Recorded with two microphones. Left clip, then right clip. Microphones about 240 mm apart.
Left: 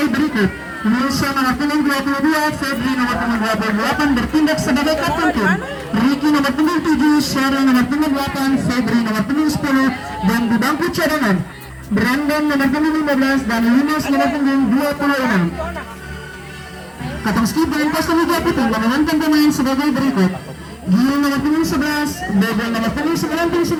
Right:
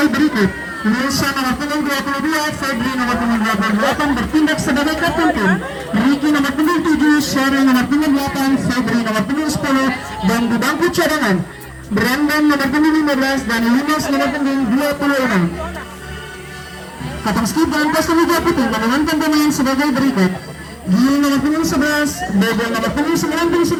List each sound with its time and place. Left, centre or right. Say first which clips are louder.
0.0 s cat: right 3 dB; right
0.9 s a man's voice: even; centre
1.4 s speech: left 2 dB; centre
17.2 s speech: right 1 dB; centre